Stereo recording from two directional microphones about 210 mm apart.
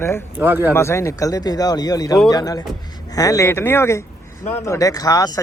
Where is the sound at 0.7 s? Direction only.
10° left (ahead or behind).